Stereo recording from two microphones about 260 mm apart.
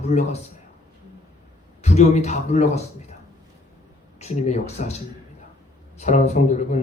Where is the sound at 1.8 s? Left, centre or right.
Left.